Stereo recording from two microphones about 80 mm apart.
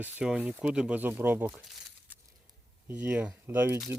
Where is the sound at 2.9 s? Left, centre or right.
Centre.